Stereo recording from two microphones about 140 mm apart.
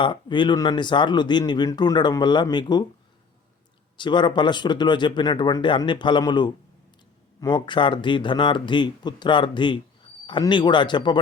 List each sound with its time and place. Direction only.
0.0 s speech: 35° left (ahead or behind)
3.9 s speech: 35° left (ahead or behind)